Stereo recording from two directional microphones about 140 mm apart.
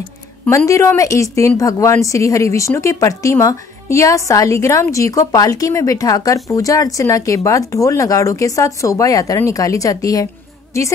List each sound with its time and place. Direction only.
0.5 s speech: 20° left (ahead or behind)